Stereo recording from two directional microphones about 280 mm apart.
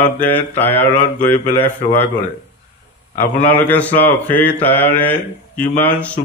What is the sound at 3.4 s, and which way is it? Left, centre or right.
Speech, centre.